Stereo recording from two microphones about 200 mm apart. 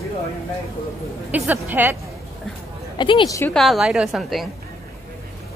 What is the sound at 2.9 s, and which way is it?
Speech, 25° left (ahead or behind).